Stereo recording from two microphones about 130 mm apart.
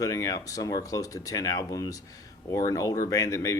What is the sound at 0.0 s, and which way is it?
Speech, 25° left (ahead or behind).